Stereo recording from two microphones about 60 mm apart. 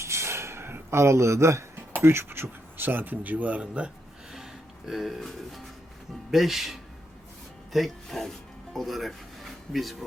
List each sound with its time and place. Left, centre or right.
0.0 s a sound: right
1.9 s speech: right; by 3.9 s centre
4.9 s speech: centre